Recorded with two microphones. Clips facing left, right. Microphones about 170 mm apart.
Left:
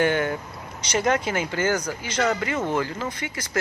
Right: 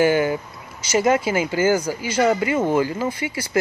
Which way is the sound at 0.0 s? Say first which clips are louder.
Right 5 dB; 5° right (ahead or behind).